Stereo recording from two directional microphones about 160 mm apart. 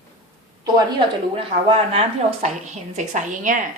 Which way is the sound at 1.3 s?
40° right (ahead or behind).